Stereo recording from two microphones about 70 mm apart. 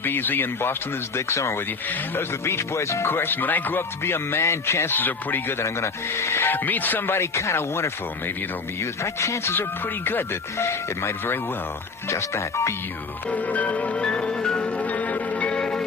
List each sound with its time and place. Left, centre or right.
0.0 s speech: left
3.1 s speech: left
4.9 s speech: left
7.2 s speech: left
13.3 s music: left